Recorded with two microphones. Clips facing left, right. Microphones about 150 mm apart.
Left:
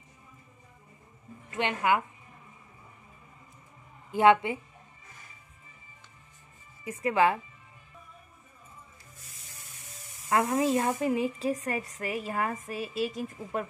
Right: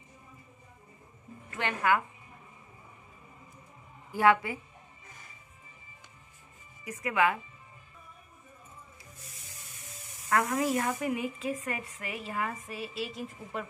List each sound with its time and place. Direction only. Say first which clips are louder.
1.5 s a woman's voice: left 2 dB; 20° left (ahead or behind)
4.1 s a woman's voice: left 3 dB; 20° left (ahead or behind)
6.8 s speech: left 3 dB; 30° left (ahead or behind)
10.3 s a woman's voice: left 3 dB; 25° left (ahead or behind); by 13.7 s 45° left (ahead or behind)